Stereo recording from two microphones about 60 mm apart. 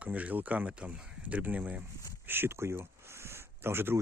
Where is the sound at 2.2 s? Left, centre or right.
Right.